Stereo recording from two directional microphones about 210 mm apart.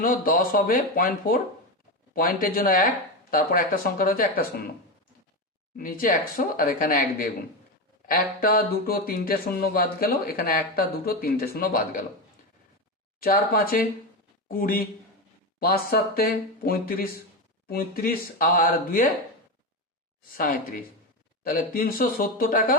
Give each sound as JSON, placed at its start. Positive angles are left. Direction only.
{"t": 0.0, "sound": "speech", "side_deg": 40}
{"t": 5.7, "sound": "speech", "side_deg": 40}
{"t": 13.1, "sound": "speech", "side_deg": 45}
{"t": 20.3, "sound": "speech", "side_deg": 45}